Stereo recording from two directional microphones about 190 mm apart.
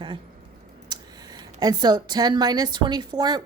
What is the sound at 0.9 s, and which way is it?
A woman's voice, 20° right (ahead or behind).